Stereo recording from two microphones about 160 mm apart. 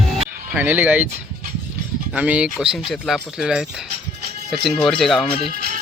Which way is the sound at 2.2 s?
5° right (ahead or behind).